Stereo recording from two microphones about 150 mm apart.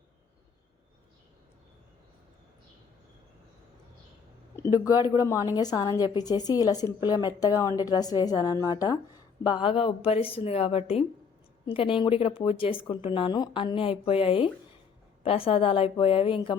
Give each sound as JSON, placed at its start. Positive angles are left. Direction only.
{"t": 4.5, "sound": "a woman's voice", "side_deg": 20}